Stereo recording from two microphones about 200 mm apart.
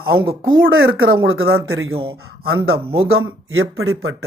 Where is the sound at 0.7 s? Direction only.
80° right.